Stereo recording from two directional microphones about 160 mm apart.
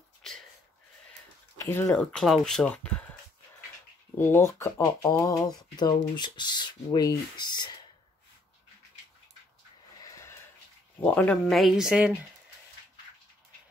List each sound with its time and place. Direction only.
0.2 s a sound: 5° left (ahead or behind)
1.6 s speech: 15° left (ahead or behind)
2.1 s speech: centre (ahead or behind)
4.2 s speech: 15° left (ahead or behind)
10.0 s a sound: 20° left (ahead or behind)
11.0 s speech: 10° left (ahead or behind)